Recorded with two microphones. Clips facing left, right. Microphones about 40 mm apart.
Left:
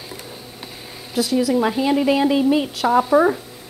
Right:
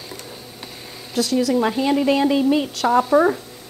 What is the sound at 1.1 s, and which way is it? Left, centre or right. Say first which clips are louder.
Speech: even; centre.